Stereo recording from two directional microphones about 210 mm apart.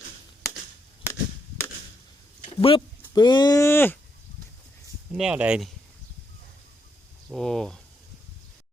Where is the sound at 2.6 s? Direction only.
25° left (ahead or behind).